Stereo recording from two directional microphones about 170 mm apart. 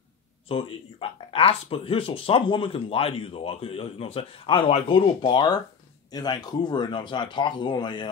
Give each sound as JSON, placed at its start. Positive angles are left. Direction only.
{"t": 0.5, "sound": "speech", "side_deg": 30}